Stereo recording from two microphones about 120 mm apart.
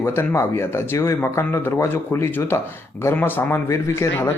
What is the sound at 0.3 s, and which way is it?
Speech, 20° left (ahead or behind).